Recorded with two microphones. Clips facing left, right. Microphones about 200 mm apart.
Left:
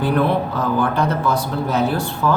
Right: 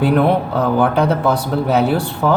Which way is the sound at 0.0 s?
65° right (ahead or behind).